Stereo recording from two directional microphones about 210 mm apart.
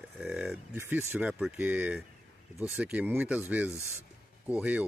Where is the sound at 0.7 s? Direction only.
10° right (ahead or behind).